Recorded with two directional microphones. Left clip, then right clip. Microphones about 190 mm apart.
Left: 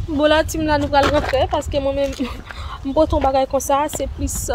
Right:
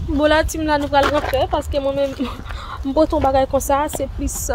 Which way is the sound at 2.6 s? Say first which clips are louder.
Even; 5° right (ahead or behind).